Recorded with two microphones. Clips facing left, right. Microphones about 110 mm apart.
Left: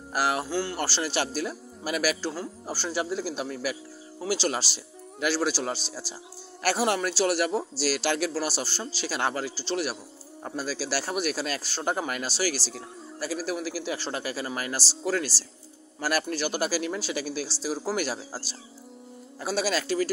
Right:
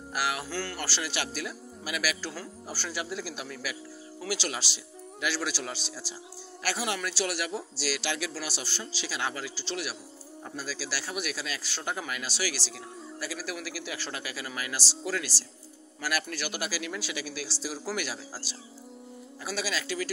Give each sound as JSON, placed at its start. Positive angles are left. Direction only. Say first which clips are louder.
{"t": 0.1, "sound": "speech", "louder": "left 5 dB", "side_deg": 35}
{"t": 0.5, "sound": "speech", "louder": "left 6 dB", "side_deg": 20}
{"t": 0.7, "sound": "speech", "louder": "left 6 dB", "side_deg": 30}